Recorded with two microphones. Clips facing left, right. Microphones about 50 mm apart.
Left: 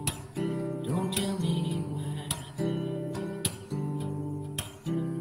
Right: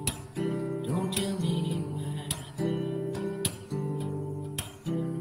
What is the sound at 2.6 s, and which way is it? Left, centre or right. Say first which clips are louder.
Guitar: right 1 dB; right.